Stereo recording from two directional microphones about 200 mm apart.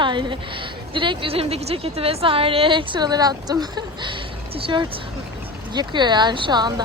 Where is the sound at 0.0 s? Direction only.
25° right (ahead or behind).